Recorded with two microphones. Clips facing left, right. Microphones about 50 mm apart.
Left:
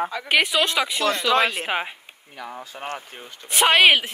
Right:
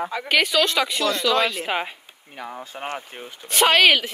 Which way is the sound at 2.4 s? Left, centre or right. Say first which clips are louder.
Right 1 dB; right.